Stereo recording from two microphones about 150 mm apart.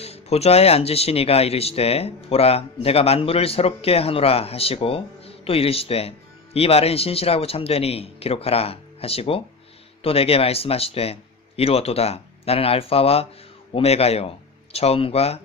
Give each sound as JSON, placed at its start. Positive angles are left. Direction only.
{"t": 0.0, "sound": "speech", "side_deg": 45}